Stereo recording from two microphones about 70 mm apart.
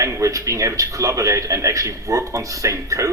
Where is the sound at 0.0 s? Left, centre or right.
Right.